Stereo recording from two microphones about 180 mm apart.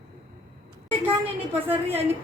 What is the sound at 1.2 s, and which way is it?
Speech, 10° right (ahead or behind).